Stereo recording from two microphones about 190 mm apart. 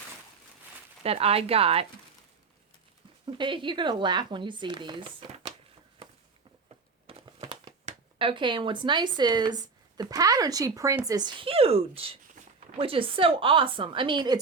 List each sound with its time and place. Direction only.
1.0 s speech: 30° right (ahead or behind)
3.2 s speech: 25° right (ahead or behind)
7.1 s crumpling: 25° right (ahead or behind)
8.2 s speech: 25° right (ahead or behind)